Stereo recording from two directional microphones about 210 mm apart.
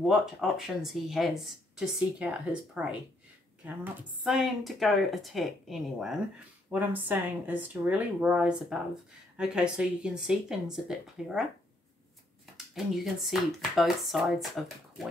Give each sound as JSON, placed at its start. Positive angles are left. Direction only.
{"t": 0.0, "sound": "speech", "side_deg": 0}
{"t": 12.5, "sound": "speech", "side_deg": 0}